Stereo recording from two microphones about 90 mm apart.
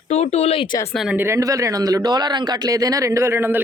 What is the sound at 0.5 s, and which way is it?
Speech, 85° left.